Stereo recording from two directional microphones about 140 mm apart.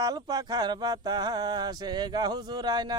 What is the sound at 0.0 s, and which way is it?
Speech, 30° right (ahead or behind).